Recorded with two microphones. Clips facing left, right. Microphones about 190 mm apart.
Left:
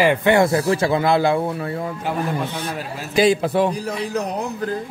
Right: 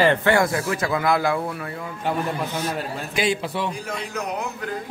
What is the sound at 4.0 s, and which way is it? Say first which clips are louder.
Speech: left 5 dB; 35° left (ahead or behind).